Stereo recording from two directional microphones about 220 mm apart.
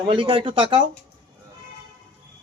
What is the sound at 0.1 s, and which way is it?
Speech, 20° right (ahead or behind).